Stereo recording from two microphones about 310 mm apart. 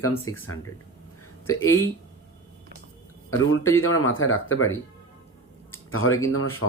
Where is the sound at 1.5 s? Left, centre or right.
Left.